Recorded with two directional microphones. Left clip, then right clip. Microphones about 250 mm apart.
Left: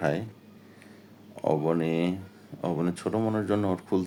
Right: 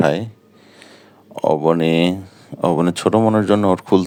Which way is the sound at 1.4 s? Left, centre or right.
Right.